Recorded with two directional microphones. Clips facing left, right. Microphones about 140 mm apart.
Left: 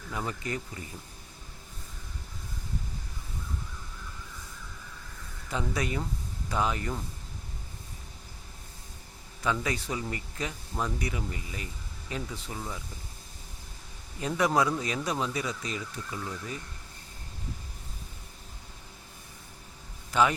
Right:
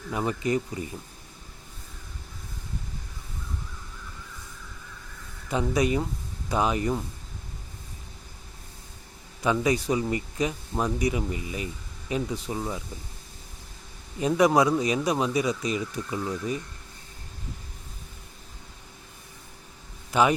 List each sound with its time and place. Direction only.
0.1 s speech: 20° right (ahead or behind)
5.5 s speech: 15° right (ahead or behind)
9.4 s speech: 15° right (ahead or behind)
14.2 s speech: 15° right (ahead or behind)
20.1 s a man's voice: 15° right (ahead or behind)